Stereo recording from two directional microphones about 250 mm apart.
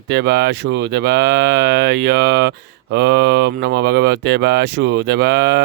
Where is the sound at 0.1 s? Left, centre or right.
Right.